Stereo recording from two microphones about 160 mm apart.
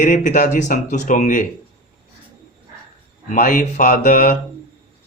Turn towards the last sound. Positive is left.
turn(degrees=55)  # may be behind; listen again after turning